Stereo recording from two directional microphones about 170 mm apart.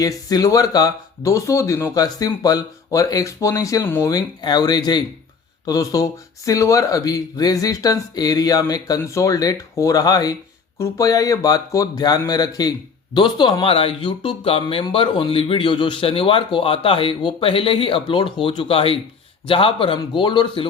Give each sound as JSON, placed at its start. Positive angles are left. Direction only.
{"t": 0.0, "sound": "speech", "side_deg": 20}